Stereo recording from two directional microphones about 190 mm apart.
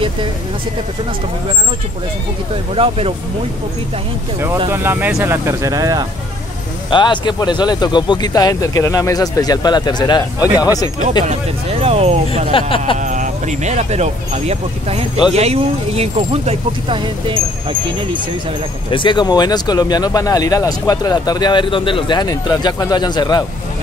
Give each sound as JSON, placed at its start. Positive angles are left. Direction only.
{"t": 2.7, "sound": "speech", "side_deg": -30}
{"t": 4.6, "sound": "speech", "side_deg": -10}
{"t": 6.9, "sound": "speech", "side_deg": 25}
{"t": 11.8, "sound": "speech", "side_deg": -35}
{"t": 12.4, "sound": "speech", "side_deg": 30}
{"t": 13.0, "sound": "speech", "side_deg": -40}
{"t": 18.9, "sound": "speech", "side_deg": 25}